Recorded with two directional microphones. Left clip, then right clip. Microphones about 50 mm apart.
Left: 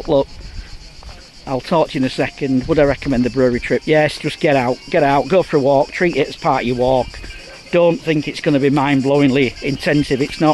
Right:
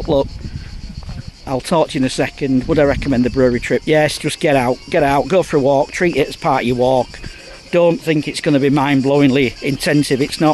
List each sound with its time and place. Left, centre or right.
0.1 s speech: right
1.4 s speech: right
3.3 s speech: right
3.6 s speech: right
10.0 s speech: right